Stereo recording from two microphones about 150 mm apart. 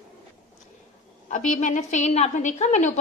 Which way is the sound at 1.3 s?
55° left (ahead or behind).